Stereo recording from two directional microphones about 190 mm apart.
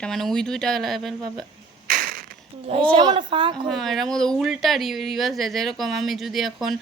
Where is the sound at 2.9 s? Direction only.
25° right (ahead or behind).